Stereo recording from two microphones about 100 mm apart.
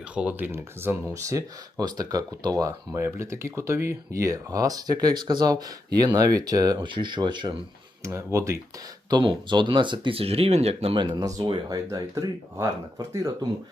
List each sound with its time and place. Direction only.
0.1 s speech: 15° right (ahead or behind); by 6.7 s 40° right (ahead or behind)
6.7 s speech: 50° right (ahead or behind)
8.0 s speech: 30° right (ahead or behind)
9.0 s speech: 50° right (ahead or behind)
10.2 s speech: 80° right
10.9 s speech: 50° right (ahead or behind)
11.3 s speech: 40° right (ahead or behind)